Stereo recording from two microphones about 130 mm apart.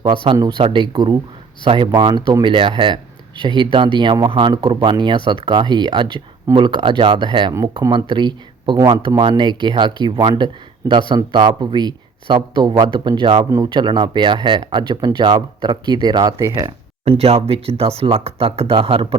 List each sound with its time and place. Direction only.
0.0 s speech: 40° right (ahead or behind)
17.1 s speech: 50° right (ahead or behind)